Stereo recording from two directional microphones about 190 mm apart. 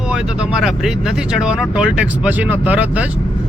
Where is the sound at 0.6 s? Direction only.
5° right (ahead or behind).